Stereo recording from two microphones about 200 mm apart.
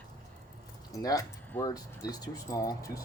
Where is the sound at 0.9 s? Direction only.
15° left (ahead or behind).